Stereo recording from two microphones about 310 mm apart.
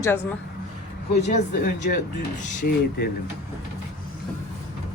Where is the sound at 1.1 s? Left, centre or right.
Left.